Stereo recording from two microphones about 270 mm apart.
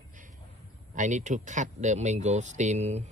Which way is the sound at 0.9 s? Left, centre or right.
Right.